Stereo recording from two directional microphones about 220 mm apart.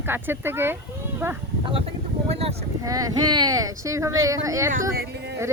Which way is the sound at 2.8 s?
15° right (ahead or behind).